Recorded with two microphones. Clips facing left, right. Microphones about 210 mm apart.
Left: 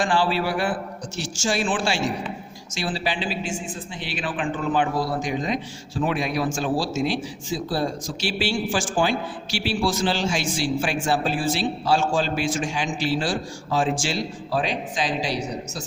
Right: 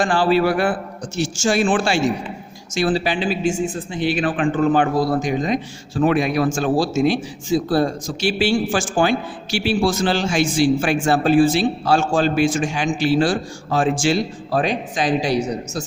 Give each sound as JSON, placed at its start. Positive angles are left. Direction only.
{"t": 0.0, "sound": "speech", "side_deg": -45}